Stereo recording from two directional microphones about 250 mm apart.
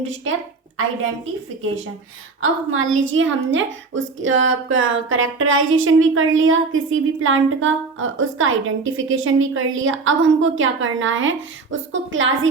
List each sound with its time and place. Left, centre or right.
0.8 s a woman's voice: right